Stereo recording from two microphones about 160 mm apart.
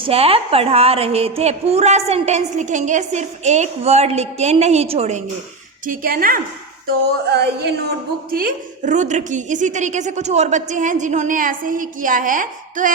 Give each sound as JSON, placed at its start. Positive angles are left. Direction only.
{"t": 0.0, "sound": "a woman's voice", "side_deg": -35}
{"t": 5.8, "sound": "a woman's voice", "side_deg": -60}
{"t": 7.3, "sound": "a sound", "side_deg": -90}
{"t": 8.3, "sound": "a woman's voice", "side_deg": -60}